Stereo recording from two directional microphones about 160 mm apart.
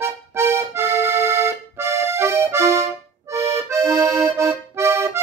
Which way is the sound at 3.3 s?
20° right (ahead or behind).